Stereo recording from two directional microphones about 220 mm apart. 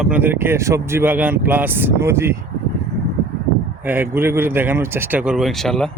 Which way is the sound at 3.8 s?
10° right (ahead or behind).